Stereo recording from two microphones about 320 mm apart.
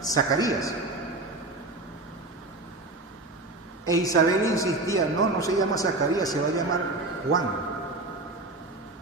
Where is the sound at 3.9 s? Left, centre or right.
Centre.